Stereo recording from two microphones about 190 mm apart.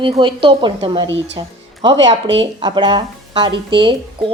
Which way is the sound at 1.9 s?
70° right (ahead or behind).